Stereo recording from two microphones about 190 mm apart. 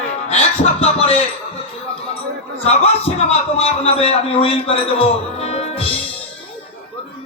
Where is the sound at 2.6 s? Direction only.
30° left (ahead or behind).